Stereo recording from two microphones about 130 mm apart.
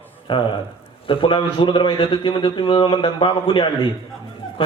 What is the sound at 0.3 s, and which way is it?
A man's voice, 40° left (ahead or behind).